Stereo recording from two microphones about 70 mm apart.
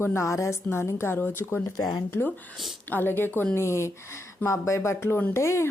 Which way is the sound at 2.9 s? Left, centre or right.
Left.